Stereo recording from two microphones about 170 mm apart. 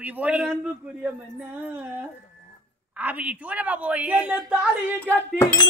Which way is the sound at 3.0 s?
10° right (ahead or behind).